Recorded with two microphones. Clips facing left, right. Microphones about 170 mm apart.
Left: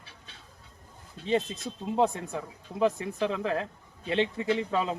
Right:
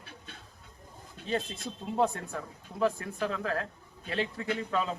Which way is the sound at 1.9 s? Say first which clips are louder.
Left 2 dB; 15° left (ahead or behind).